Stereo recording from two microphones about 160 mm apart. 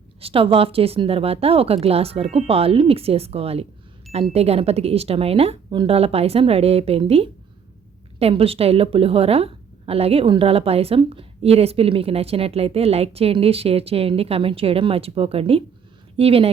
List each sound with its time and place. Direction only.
0.2 s a woman's voice: 35° right (ahead or behind)